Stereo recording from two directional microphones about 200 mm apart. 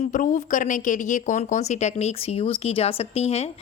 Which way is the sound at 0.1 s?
40° left (ahead or behind).